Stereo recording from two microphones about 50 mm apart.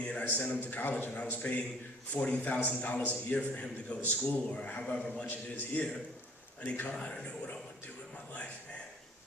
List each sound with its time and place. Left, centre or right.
0.0 s a man's voice: left
6.9 s a man's voice: left